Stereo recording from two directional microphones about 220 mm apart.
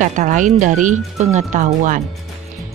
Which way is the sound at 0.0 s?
35° right (ahead or behind).